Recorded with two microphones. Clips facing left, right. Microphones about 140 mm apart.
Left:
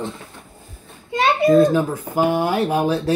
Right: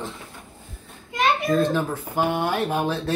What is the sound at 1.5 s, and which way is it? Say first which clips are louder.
Speech: left 7 dB; 10° left (ahead or behind).